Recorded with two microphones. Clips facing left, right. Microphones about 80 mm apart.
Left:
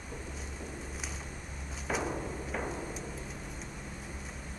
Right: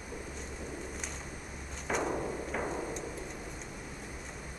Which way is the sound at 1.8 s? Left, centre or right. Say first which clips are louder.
Right 2 dB; centre.